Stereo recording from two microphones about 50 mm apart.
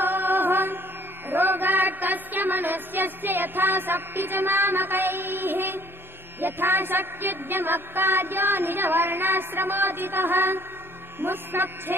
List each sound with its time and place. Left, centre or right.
0.0 s music: right